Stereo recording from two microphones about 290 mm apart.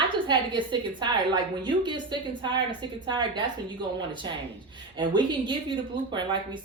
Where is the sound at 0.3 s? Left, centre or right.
Centre.